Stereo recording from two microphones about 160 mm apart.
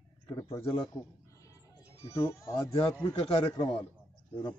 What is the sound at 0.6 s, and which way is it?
Speech, 30° left (ahead or behind).